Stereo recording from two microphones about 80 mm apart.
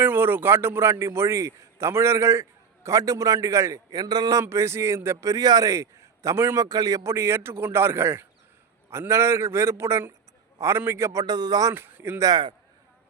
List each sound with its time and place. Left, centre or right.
0.0 s a man's voice: right
3.9 s a man's voice: right
4.4 s a man's voice: right
5.3 s a man's voice: right
6.6 s a man's voice: right
7.0 s a man's voice: right
11.3 s a man's voice: right
11.7 s speech: right
12.2 s a man's voice: right